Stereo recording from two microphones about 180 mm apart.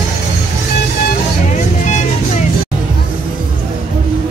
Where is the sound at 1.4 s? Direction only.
40° left (ahead or behind).